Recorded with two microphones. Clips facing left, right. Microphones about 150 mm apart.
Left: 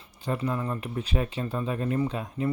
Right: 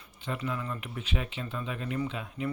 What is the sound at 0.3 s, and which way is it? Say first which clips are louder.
Speech: left 5 dB; 35° left (ahead or behind).